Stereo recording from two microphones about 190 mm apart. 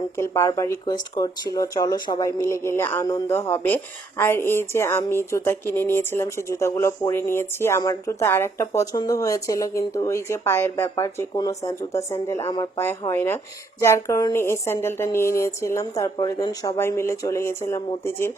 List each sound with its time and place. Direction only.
0.2 s speech: 15° left (ahead or behind)